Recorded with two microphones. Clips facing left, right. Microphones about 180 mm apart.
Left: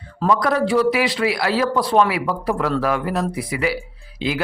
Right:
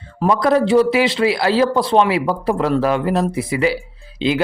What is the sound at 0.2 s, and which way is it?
Speech, 25° right (ahead or behind).